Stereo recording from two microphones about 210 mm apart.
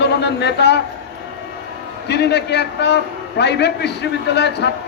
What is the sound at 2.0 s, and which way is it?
A man's voice, 55° left (ahead or behind).